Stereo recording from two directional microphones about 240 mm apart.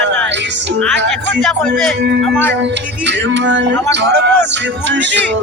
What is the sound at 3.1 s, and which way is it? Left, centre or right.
Music, right.